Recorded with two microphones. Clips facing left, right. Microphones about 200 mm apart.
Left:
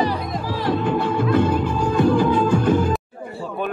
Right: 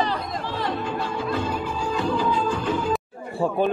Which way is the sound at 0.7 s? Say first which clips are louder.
Left 7 dB; 60° left (ahead or behind).